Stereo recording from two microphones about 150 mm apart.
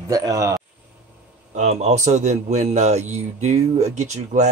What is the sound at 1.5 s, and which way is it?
A man's voice, 50° right (ahead or behind).